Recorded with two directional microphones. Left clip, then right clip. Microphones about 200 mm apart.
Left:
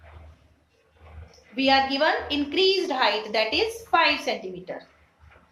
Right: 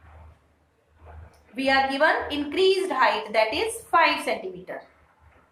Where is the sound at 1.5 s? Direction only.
25° left (ahead or behind).